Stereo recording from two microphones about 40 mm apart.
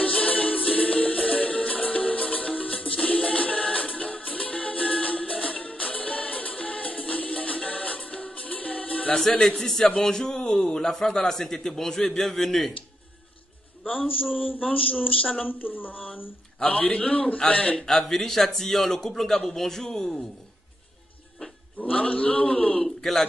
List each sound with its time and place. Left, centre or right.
0.0 s music: left
9.6 s a man's voice: centre
14.7 s a man's voice: left
16.6 s a man's voice: left
17.7 s a man's voice: centre
21.7 s a sound: left
22.0 s a man's voice: left
22.9 s a man's voice: centre